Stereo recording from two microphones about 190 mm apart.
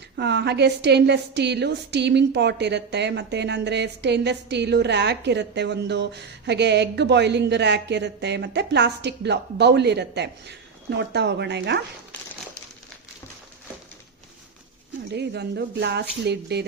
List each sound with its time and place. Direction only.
0.2 s a woman's voice: 65° right (ahead or behind)
15.1 s a woman's voice: 60° right (ahead or behind)